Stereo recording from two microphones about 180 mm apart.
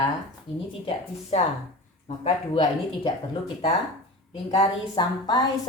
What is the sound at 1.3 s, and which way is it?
Speech, 35° left (ahead or behind).